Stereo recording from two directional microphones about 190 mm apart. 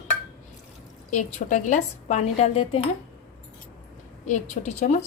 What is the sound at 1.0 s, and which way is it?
Speech, 40° left (ahead or behind).